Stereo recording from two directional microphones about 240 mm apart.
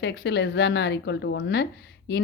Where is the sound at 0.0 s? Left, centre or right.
Left.